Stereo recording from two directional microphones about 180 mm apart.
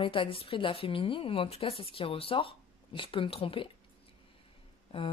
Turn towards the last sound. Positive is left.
turn(degrees=30)  # may be behind; listen again after turning